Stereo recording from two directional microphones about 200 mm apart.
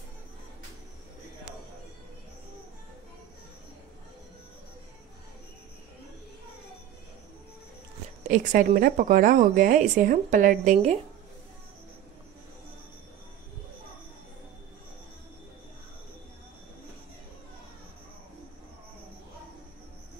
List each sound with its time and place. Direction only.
8.3 s a woman's voice: 40° right (ahead or behind)